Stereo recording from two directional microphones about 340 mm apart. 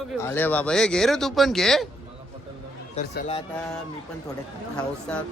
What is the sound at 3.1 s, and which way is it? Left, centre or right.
Speech, centre.